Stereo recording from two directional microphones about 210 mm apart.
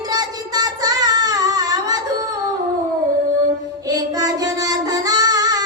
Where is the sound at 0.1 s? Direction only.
20° right (ahead or behind).